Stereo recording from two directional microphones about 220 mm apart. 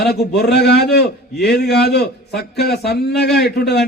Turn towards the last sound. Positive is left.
turn(degrees=50)  # may be behind; listen again after turning